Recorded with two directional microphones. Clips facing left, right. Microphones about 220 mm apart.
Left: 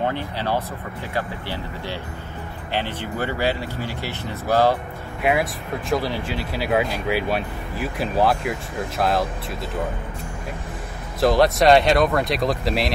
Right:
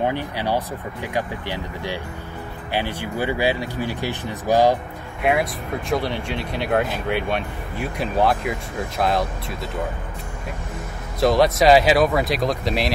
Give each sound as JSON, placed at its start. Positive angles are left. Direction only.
{"t": 0.0, "sound": "speech", "side_deg": -15}
{"t": 5.2, "sound": "speech", "side_deg": 0}
{"t": 11.1, "sound": "speech", "side_deg": 0}